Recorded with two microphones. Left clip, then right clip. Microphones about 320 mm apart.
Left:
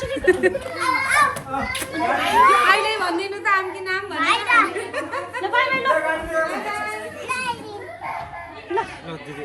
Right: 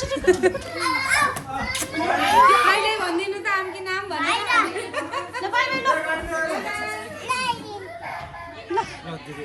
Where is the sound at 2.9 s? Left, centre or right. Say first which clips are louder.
Left 1 dB; centre.